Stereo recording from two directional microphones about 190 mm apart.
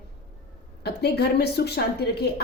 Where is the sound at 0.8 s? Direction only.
60° left (ahead or behind).